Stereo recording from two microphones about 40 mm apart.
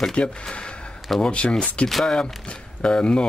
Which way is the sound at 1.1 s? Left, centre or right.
Centre.